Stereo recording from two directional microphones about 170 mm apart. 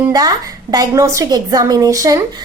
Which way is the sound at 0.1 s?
20° right (ahead or behind).